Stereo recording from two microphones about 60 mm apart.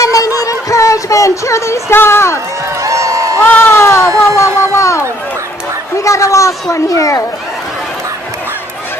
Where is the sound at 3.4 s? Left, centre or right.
Left.